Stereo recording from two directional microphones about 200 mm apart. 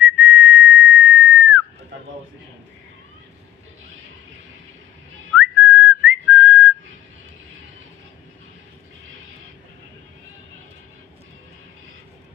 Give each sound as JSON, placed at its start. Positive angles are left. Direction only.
{"t": 0.0, "sound": "whistle", "side_deg": -10}
{"t": 5.4, "sound": "whistling", "side_deg": -10}